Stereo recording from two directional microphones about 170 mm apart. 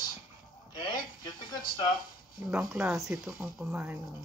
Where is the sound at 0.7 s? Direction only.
25° left (ahead or behind).